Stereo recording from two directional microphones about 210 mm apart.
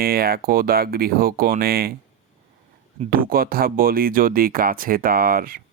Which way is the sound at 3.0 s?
45° right (ahead or behind).